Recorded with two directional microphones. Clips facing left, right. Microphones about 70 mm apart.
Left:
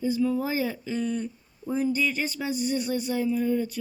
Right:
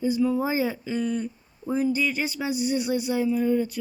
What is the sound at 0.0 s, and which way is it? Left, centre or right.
Speech, centre.